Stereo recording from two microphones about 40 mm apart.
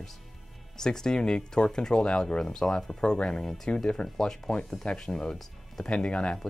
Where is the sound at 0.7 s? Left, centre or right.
Centre.